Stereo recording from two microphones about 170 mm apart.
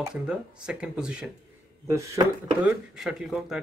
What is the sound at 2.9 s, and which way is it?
Speech, 5° right (ahead or behind).